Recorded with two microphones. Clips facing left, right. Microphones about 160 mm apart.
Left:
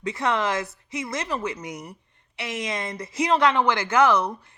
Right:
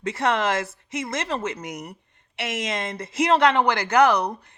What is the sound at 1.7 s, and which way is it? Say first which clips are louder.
Speech: right 2 dB; 20° right (ahead or behind).